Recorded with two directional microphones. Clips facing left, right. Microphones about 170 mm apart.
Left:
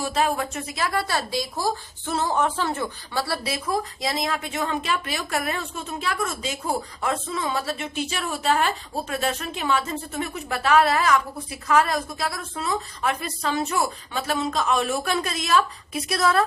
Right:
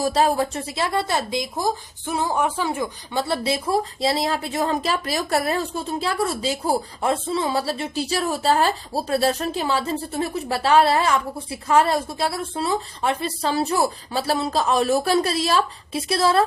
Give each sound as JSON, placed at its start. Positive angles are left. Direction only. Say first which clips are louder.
{"t": 0.0, "sound": "a woman's voice", "louder": "right 4 dB", "side_deg": -35}